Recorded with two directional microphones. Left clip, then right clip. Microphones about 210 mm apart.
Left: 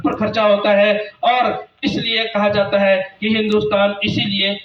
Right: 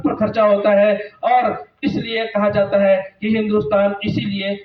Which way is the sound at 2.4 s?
45° left (ahead or behind).